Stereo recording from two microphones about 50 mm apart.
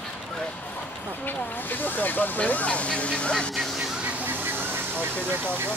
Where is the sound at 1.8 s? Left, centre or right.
Left.